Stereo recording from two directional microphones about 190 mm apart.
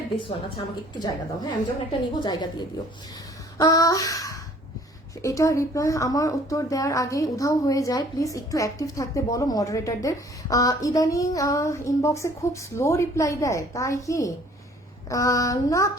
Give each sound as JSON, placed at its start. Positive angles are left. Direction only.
{"t": 0.2, "sound": "a woman's voice", "side_deg": 25}